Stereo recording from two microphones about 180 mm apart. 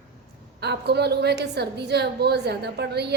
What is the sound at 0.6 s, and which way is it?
A woman's voice, 65° right (ahead or behind).